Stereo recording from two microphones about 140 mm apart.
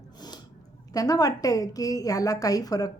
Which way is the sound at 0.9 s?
25° left (ahead or behind).